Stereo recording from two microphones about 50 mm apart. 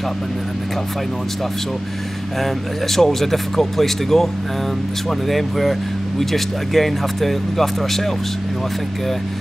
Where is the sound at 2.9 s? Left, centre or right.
Centre.